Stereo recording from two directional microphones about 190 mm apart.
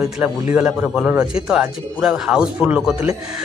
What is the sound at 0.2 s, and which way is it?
Speech, 5° right (ahead or behind).